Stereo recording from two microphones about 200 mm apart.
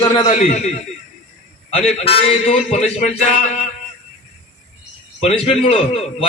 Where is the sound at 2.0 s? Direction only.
30° left (ahead or behind).